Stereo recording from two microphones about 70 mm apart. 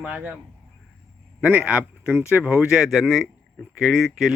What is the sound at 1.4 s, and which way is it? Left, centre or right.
Speech, centre.